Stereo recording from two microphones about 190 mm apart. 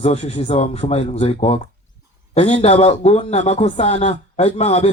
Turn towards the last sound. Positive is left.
turn(degrees=35)  # may be behind; listen again after turning